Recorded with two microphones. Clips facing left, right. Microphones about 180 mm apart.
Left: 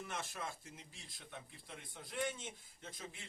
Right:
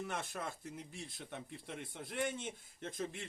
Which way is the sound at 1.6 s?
60° right (ahead or behind).